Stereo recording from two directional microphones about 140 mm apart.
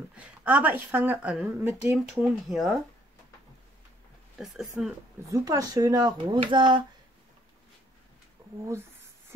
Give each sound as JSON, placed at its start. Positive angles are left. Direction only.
{"t": 0.2, "sound": "a woman's voice", "side_deg": -10}
{"t": 2.0, "sound": "speech", "side_deg": 0}
{"t": 4.4, "sound": "speech", "side_deg": 0}
{"t": 5.3, "sound": "speech", "side_deg": -25}
{"t": 8.4, "sound": "a sound", "side_deg": -25}